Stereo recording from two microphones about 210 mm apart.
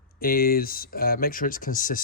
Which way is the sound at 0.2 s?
45° left (ahead or behind).